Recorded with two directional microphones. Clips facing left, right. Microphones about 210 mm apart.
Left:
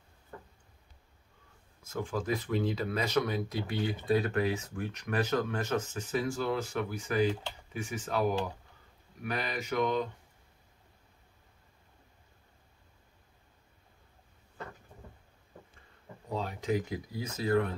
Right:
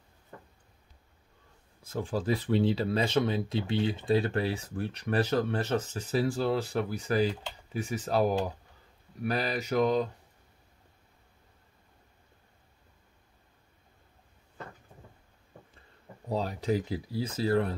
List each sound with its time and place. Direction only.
1.8 s speech: 30° right (ahead or behind)
16.3 s speech: 35° right (ahead or behind)